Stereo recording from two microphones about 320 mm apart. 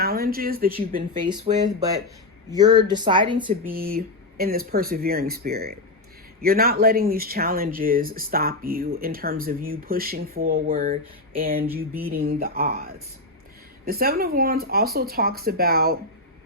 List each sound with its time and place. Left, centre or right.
0.0 s speech: right
1.2 s speech: centre
3.7 s speech: right